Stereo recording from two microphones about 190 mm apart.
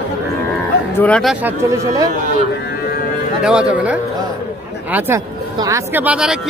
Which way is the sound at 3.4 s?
5° right (ahead or behind).